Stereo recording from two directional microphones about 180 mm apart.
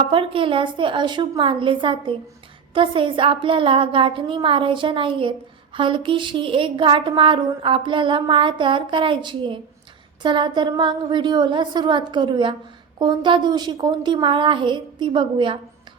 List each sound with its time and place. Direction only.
0.0 s a woman's voice: 30° right (ahead or behind)